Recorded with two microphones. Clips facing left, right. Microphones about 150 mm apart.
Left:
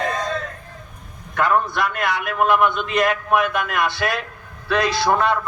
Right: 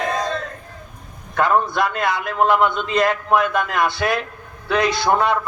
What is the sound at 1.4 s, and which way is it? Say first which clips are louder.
A man's voice: right 2 dB; 25° right (ahead or behind).